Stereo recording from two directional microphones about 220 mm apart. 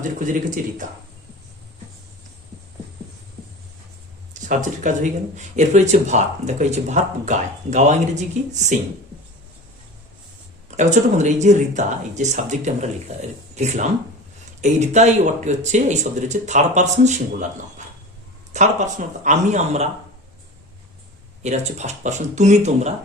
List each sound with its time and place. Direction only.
0.0 s speech: 35° right (ahead or behind)
4.4 s speech: 35° right (ahead or behind)
10.8 s speech: 30° right (ahead or behind)
18.5 s speech: 35° right (ahead or behind)
21.4 s speech: 30° right (ahead or behind)